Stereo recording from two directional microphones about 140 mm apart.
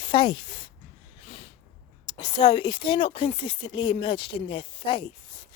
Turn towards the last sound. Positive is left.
turn(degrees=35)  # may be behind; listen again after turning